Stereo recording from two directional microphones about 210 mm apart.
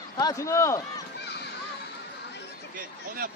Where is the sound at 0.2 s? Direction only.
15° left (ahead or behind).